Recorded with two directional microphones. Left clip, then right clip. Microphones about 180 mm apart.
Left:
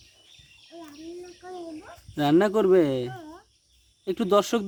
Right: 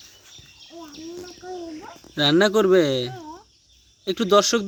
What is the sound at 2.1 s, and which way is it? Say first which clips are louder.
Speech: right 4 dB; 10° left (ahead or behind).